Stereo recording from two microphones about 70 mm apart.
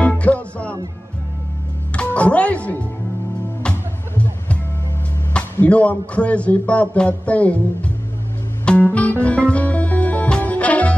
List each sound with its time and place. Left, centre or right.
0.0 s music: centre
2.0 s speech: centre
5.6 s speech: centre
8.6 s music: centre